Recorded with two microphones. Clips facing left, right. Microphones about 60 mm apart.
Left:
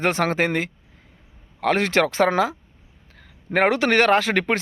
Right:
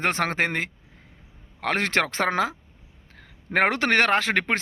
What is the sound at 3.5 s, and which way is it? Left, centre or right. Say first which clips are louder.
Speech: left 3 dB; right.